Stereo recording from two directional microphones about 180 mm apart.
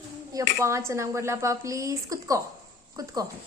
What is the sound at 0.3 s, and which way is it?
Speech, 15° right (ahead or behind).